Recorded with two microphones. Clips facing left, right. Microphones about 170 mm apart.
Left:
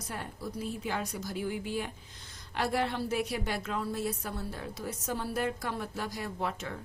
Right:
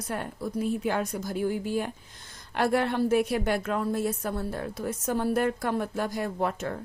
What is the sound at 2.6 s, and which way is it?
A woman's voice, 55° right (ahead or behind).